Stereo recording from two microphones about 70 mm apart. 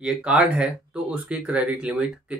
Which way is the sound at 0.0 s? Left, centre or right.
Centre.